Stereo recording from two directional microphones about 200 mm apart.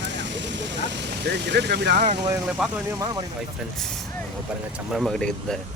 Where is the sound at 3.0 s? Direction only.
20° right (ahead or behind).